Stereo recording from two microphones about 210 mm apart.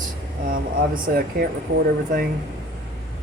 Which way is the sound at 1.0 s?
45° right (ahead or behind).